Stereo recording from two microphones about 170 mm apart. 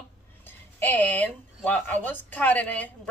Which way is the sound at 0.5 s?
10° left (ahead or behind).